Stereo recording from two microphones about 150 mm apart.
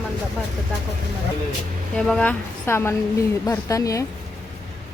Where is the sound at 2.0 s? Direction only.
5° left (ahead or behind).